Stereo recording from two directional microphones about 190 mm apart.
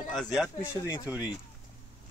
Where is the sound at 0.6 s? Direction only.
15° left (ahead or behind).